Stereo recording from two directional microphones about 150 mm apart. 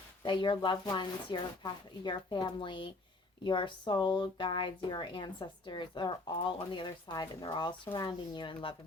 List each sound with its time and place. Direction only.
0.3 s speech: 30° left (ahead or behind)